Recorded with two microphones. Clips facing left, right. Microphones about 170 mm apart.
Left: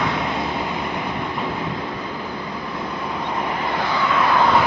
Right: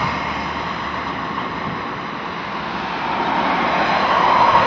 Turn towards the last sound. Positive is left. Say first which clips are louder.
# right 4 dB
turn(degrees=-85)